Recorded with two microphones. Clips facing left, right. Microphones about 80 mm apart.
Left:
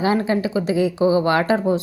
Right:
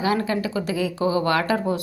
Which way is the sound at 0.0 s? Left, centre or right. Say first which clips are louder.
Left 3 dB; left.